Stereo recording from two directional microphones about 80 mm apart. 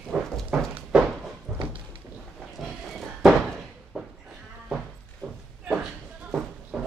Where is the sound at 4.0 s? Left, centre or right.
Centre.